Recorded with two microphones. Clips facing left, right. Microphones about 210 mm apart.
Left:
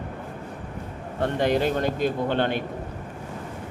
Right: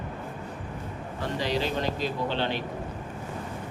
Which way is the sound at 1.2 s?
55° left (ahead or behind).